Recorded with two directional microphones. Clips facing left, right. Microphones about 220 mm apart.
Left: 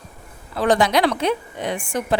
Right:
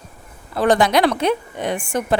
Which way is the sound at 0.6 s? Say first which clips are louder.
Right 2 dB; 55° right (ahead or behind).